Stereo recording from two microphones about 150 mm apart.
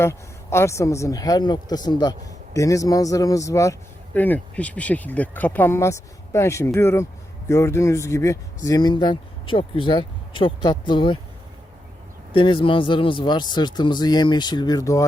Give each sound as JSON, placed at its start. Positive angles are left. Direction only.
{"t": 0.0, "sound": "speech", "side_deg": 15}
{"t": 12.3, "sound": "speech", "side_deg": 35}